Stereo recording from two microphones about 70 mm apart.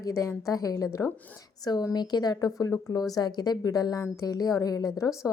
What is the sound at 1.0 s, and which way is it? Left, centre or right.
Speech, left.